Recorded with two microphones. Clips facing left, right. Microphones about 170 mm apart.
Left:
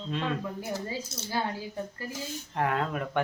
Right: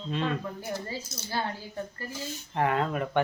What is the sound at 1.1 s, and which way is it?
Speech, 25° left (ahead or behind).